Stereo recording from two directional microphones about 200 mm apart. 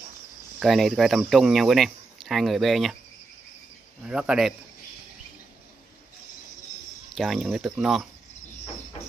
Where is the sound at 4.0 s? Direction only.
5° right (ahead or behind).